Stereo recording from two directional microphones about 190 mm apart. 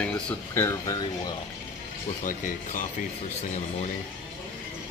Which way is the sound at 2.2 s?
45° left (ahead or behind).